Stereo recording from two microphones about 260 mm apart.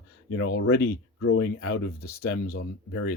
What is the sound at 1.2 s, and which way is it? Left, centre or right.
Speech, left.